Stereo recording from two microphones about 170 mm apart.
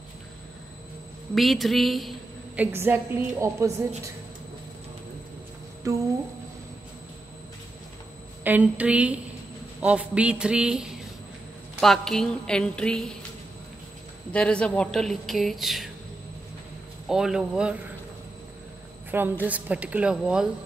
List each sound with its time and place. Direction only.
1.3 s a woman's voice: centre (ahead or behind); by 3.7 s 15° right (ahead or behind)
5.9 s speech: 20° right (ahead or behind)
8.5 s a woman's voice: 10° right (ahead or behind)
14.3 s a woman's voice: 5° left (ahead or behind)
17.1 s a woman's voice: 5° right (ahead or behind)
19.0 s a woman's voice: 10° right (ahead or behind)